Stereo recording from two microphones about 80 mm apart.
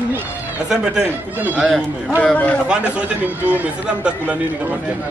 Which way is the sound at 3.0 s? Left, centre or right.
Centre.